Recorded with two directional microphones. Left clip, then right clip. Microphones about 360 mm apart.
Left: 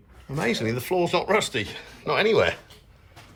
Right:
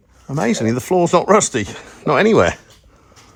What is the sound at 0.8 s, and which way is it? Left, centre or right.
Speech, right.